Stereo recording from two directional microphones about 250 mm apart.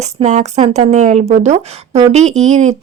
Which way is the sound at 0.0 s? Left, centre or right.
Right.